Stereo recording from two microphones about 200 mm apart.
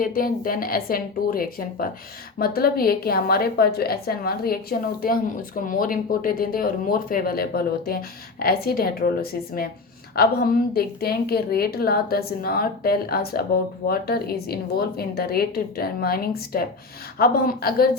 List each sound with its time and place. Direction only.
0.0 s speech: 45° left (ahead or behind)